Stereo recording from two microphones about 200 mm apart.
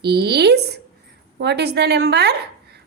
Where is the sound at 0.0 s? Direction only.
55° right (ahead or behind).